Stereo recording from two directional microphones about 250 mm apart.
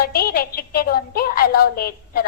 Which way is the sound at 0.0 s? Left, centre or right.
Left.